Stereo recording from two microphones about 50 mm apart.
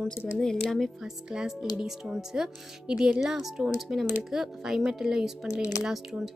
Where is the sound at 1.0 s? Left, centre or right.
Centre.